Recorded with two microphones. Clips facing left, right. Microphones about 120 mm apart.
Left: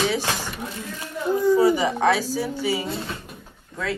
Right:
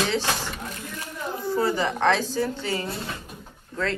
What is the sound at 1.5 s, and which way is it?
A woman's voice, 10° left (ahead or behind).